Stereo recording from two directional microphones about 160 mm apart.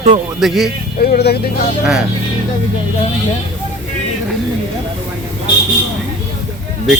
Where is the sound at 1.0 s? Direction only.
75° left (ahead or behind).